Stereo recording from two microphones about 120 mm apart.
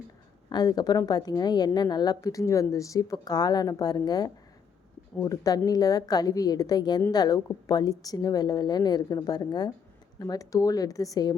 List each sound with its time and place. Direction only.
0.5 s a woman's voice: 35° left (ahead or behind)